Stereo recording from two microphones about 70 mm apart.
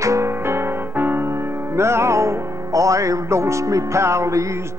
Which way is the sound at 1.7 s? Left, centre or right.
Right.